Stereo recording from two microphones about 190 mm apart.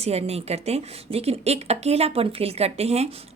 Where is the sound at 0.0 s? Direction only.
35° right (ahead or behind).